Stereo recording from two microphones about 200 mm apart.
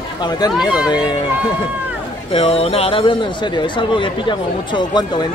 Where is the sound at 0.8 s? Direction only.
20° left (ahead or behind).